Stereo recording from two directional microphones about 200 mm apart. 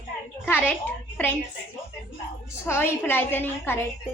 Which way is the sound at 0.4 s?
10° left (ahead or behind).